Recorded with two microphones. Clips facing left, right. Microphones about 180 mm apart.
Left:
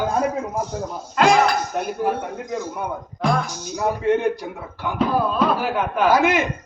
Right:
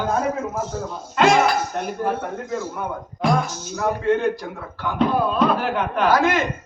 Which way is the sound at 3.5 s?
15° left (ahead or behind).